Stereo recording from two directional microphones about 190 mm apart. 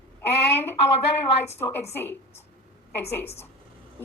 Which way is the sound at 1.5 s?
10° left (ahead or behind).